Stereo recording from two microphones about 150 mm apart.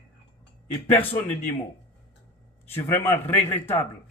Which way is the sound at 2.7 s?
15° left (ahead or behind).